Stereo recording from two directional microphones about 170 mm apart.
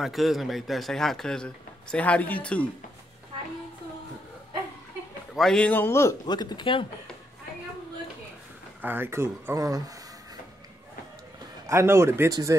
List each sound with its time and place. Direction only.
0.0 s a man's voice: centre (ahead or behind)
5.3 s speech: centre (ahead or behind); by 6.9 s 30° left (ahead or behind)
8.8 s speech: 15° right (ahead or behind)
11.6 s speech: 15° right (ahead or behind)